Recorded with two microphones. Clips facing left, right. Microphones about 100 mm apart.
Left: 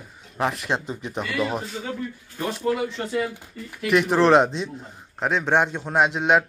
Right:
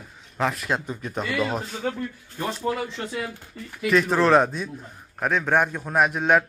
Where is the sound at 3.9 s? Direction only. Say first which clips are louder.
Left 1 dB; 20° left (ahead or behind).